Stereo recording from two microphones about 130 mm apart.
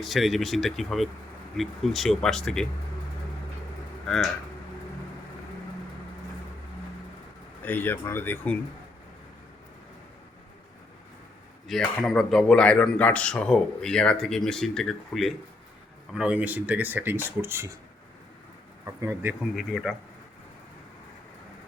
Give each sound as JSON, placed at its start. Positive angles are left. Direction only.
{"t": 0.0, "sound": "speech", "side_deg": 0}
{"t": 4.1, "sound": "speech", "side_deg": 5}
{"t": 7.6, "sound": "speech", "side_deg": 15}
{"t": 11.7, "sound": "speech", "side_deg": 5}
{"t": 18.9, "sound": "speech", "side_deg": -20}
{"t": 19.5, "sound": "speech", "side_deg": 0}